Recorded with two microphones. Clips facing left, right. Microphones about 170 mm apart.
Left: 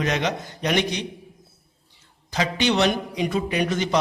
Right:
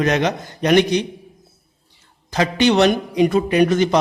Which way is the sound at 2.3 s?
50° right (ahead or behind).